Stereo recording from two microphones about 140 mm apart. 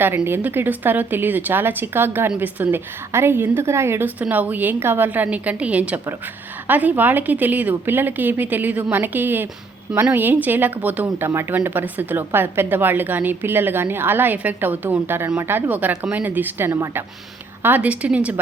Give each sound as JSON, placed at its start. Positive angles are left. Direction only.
{"t": 0.3, "sound": "speech", "side_deg": -15}